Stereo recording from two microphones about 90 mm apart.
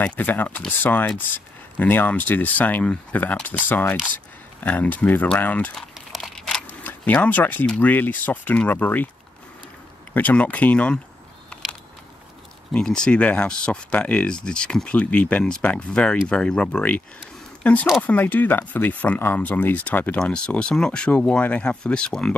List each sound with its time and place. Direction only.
0.0 s speech: 15° left (ahead or behind)
5.8 s crumpling: centre (ahead or behind)
6.7 s speech: 20° left (ahead or behind)
10.1 s speech: 15° left (ahead or behind)
12.7 s speech: 10° left (ahead or behind)